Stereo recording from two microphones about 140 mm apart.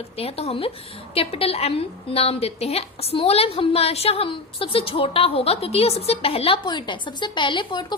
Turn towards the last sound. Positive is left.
turn(degrees=30)  # may be behind; listen again after turning